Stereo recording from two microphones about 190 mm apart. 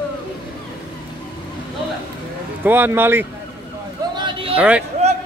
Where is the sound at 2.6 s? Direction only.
10° right (ahead or behind).